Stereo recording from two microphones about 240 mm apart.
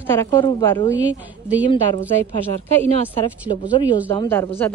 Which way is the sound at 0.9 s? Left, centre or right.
Centre.